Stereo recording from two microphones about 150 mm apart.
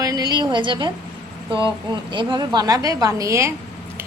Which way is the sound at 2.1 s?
30° right (ahead or behind).